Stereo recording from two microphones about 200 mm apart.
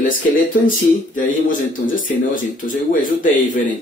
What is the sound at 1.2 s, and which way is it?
Speech, 40° left (ahead or behind).